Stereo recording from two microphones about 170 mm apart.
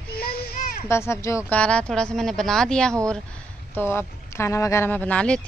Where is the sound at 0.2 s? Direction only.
60° left (ahead or behind).